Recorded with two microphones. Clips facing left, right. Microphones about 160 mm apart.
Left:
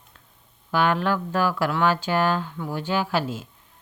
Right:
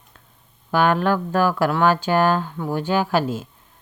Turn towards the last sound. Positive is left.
turn(degrees=-45)  # may be behind; listen again after turning